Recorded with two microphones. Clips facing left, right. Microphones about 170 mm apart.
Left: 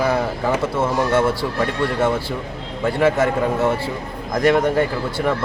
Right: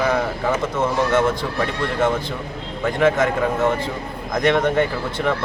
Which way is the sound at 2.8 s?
10° left (ahead or behind).